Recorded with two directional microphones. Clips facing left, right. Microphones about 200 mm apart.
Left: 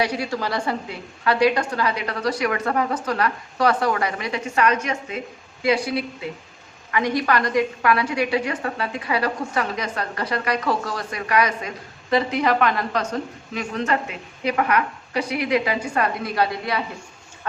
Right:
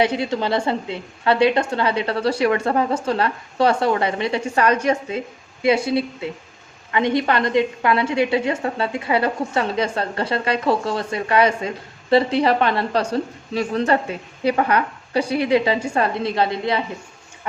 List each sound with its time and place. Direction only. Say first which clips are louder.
0.0 s a woman's voice: right 4 dB; 25° right (ahead or behind)